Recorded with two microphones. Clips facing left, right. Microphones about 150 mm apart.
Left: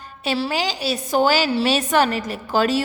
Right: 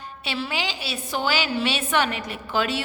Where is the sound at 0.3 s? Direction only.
40° left (ahead or behind).